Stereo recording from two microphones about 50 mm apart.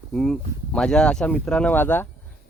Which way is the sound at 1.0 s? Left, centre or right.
Left.